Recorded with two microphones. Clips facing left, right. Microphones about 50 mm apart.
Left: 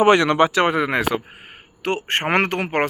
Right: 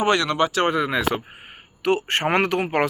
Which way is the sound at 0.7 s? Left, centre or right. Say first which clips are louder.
Left 2 dB; left.